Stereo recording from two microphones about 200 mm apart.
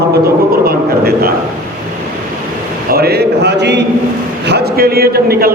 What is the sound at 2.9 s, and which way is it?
A man's voice, 50° right (ahead or behind).